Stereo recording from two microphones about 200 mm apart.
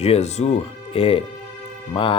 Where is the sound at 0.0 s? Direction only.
30° left (ahead or behind).